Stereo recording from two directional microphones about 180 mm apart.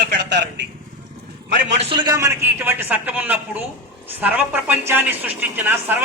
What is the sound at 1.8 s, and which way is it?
A man's voice, 30° right (ahead or behind).